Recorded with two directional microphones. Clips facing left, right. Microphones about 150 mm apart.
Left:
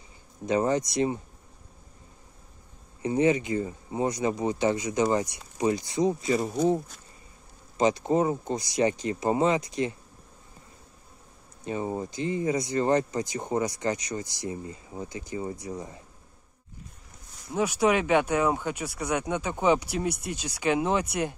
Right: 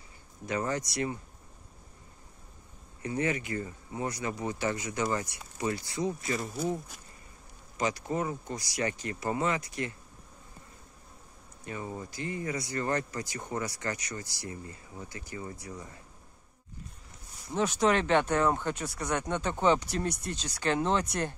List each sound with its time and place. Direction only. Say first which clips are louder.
0.5 s speech: left 7 dB; 20° left (ahead or behind)
3.0 s speech: left 8 dB; 20° left (ahead or behind)
7.7 s speech: left 8 dB; 25° left (ahead or behind)
11.6 s speech: left 8 dB; 25° left (ahead or behind)
17.5 s speech: left 3 dB; 10° left (ahead or behind)